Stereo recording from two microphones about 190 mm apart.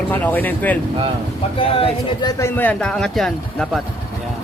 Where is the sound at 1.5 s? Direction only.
30° left (ahead or behind).